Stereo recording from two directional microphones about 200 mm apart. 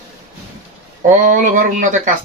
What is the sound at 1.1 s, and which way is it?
Speech, 40° right (ahead or behind).